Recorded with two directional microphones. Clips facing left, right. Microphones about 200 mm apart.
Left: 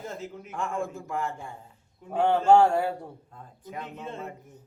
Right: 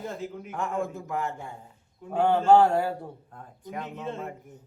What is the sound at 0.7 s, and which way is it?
Speech, centre (ahead or behind).